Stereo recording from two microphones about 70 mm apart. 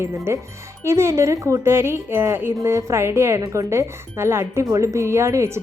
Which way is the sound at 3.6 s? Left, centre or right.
Right.